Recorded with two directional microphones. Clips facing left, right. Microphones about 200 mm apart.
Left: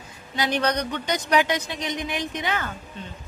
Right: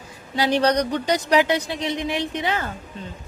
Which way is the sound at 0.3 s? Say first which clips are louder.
Right 5 dB; 30° right (ahead or behind).